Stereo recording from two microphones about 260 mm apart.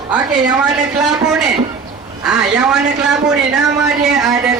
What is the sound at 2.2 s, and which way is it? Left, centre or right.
A man's voice, centre.